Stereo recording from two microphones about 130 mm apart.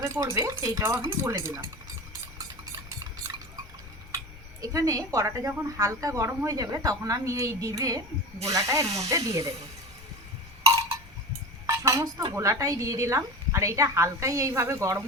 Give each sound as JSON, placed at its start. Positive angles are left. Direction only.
{"t": 0.0, "sound": "speech", "side_deg": -20}
{"t": 4.6, "sound": "speech", "side_deg": -25}
{"t": 11.6, "sound": "speech", "side_deg": -25}